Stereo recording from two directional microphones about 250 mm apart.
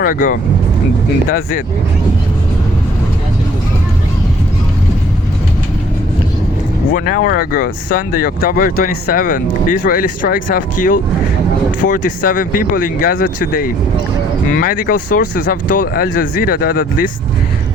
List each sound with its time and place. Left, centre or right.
0.0 s speech: left
6.9 s speech: left